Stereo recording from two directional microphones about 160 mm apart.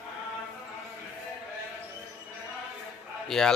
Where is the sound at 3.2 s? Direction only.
Centre (ahead or behind).